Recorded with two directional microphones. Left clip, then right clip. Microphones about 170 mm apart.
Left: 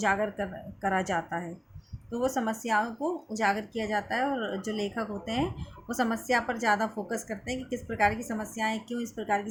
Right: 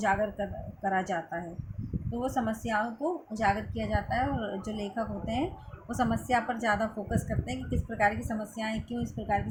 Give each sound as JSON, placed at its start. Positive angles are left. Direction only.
{"t": 0.0, "sound": "a woman's voice", "side_deg": 15}